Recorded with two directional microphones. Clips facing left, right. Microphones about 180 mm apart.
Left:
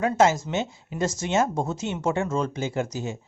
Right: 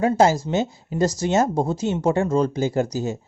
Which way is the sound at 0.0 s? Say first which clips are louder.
Right 3 dB; 30° right (ahead or behind).